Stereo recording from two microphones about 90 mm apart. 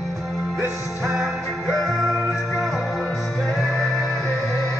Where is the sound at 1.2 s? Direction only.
Centre (ahead or behind).